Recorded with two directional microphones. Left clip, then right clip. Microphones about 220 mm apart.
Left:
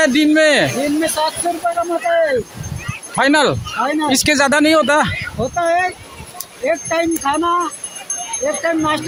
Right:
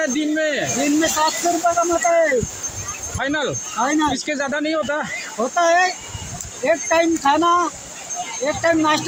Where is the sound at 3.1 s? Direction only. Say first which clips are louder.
Left 9 dB; 40° left (ahead or behind).